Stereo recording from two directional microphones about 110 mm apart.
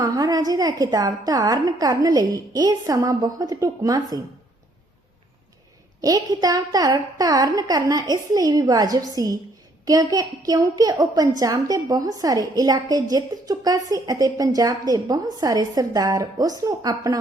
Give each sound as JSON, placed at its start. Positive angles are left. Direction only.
{"t": 0.0, "sound": "a woman's voice", "side_deg": -35}
{"t": 6.0, "sound": "a woman's voice", "side_deg": -35}